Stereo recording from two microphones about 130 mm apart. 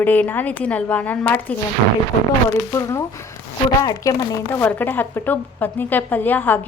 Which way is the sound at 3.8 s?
25° left (ahead or behind).